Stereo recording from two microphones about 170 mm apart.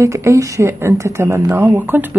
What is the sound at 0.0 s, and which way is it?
A woman's voice, 15° right (ahead or behind).